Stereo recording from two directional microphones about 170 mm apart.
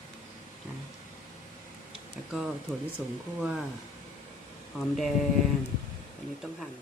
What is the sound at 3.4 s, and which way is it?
Speech, 5° right (ahead or behind).